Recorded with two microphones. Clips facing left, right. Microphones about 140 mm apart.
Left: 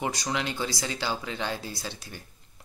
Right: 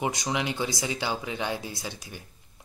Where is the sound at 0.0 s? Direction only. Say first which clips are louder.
Right 1 dB; 20° right (ahead or behind).